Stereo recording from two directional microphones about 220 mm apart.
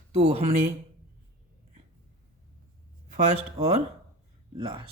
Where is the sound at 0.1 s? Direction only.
25° right (ahead or behind).